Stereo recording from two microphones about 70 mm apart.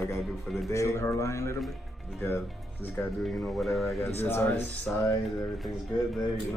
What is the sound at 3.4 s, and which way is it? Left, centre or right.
Speech, centre.